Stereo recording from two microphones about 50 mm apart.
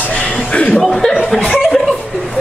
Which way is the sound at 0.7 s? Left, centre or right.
Centre.